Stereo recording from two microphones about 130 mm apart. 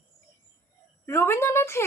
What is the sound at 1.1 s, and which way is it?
Speech, 20° left (ahead or behind).